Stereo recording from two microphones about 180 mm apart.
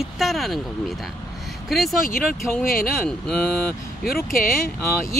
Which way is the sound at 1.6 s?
Centre (ahead or behind).